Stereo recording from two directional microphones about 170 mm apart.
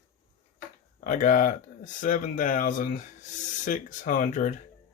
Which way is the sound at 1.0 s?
50° left (ahead or behind).